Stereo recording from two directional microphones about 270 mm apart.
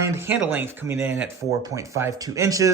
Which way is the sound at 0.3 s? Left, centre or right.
Centre.